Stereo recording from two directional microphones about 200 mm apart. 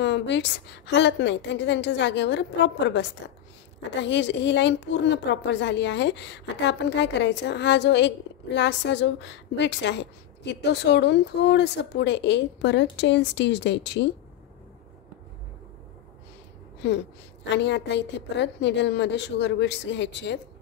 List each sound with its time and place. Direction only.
0.0 s a woman's voice: 60° left (ahead or behind)
16.8 s a woman's voice: 60° left (ahead or behind)